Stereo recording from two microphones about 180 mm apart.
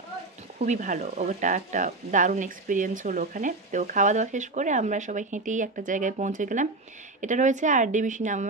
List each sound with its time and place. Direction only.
0.6 s speech: 45° right (ahead or behind)